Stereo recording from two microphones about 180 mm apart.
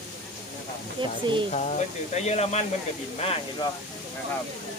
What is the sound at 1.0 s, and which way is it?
Speech, 25° right (ahead or behind).